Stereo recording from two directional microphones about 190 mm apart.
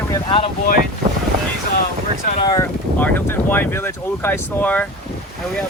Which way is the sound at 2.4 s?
20° left (ahead or behind).